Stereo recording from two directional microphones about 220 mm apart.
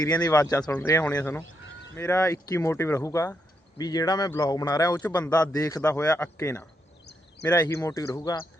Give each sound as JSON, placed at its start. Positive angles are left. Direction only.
{"t": 0.0, "sound": "a man's voice", "side_deg": 15}
{"t": 7.0, "sound": "a sound", "side_deg": 50}
{"t": 7.5, "sound": "a man's voice", "side_deg": 15}